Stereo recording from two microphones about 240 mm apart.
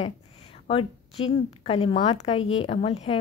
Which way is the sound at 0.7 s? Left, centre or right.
Left.